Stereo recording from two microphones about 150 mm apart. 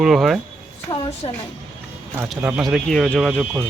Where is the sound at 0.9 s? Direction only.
40° left (ahead or behind).